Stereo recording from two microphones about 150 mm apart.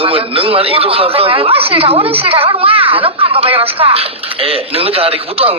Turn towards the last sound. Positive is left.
turn(degrees=-40)  # may be behind; listen again after turning